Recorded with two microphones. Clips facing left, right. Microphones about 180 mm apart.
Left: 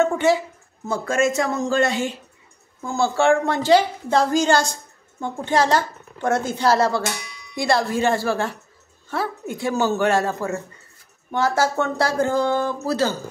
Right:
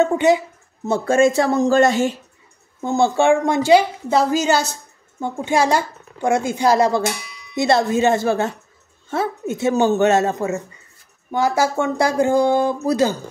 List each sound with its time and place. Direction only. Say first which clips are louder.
0.0 s a woman's voice: right 3 dB; 20° right (ahead or behind); by 2.1 s 45° right (ahead or behind)
2.8 s a woman's voice: right 3 dB; 20° right (ahead or behind)